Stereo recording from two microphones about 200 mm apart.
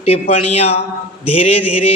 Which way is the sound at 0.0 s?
30° left (ahead or behind).